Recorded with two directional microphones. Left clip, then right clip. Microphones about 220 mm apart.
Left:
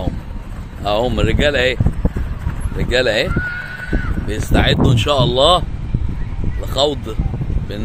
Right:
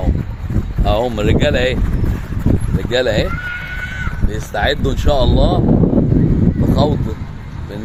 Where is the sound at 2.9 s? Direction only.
Centre (ahead or behind).